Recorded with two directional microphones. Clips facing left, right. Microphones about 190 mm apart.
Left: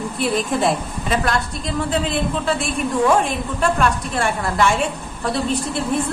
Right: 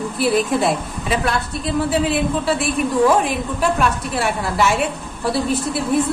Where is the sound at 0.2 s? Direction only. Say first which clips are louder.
Right 2 dB; centre (ahead or behind).